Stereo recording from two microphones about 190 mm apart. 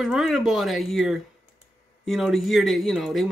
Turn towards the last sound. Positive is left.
turn(degrees=0)  # may be behind; listen again after turning